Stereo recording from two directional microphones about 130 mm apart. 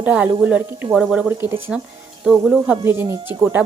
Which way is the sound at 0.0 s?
10° right (ahead or behind).